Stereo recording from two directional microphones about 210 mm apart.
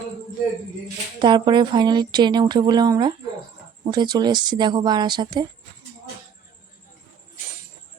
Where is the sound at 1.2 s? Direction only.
20° right (ahead or behind).